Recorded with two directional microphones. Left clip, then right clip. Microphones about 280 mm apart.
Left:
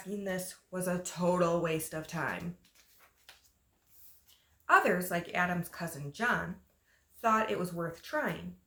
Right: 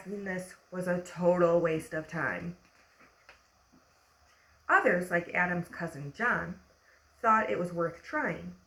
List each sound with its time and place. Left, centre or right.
0.3 s speech: centre
4.6 s speech: centre